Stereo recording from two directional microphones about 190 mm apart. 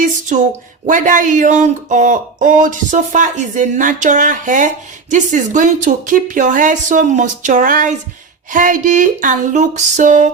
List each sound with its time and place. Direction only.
0.9 s speech: 40° right (ahead or behind)